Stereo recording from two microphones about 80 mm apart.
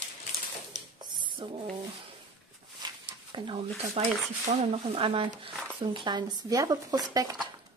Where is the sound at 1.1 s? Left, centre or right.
Right.